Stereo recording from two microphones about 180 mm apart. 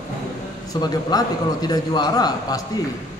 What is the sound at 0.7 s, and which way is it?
A man's voice, 20° left (ahead or behind).